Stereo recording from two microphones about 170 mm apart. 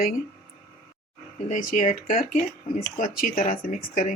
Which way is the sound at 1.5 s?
50° left (ahead or behind).